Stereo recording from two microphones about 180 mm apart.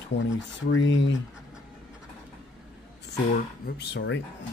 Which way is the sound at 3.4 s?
60° left (ahead or behind).